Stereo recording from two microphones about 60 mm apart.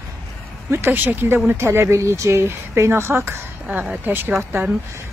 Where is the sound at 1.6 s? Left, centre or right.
Right.